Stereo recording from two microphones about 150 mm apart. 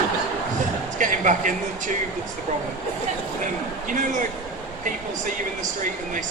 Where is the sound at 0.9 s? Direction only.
60° right (ahead or behind).